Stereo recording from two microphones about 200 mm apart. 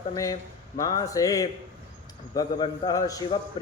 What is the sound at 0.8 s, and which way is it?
Speech, 20° left (ahead or behind).